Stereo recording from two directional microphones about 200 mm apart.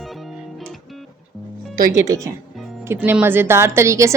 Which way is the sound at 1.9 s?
15° right (ahead or behind).